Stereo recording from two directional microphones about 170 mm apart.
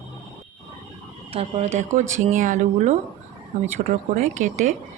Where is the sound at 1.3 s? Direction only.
35° right (ahead or behind).